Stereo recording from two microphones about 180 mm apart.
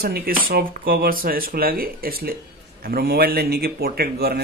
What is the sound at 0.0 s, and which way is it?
Speech, 60° right (ahead or behind).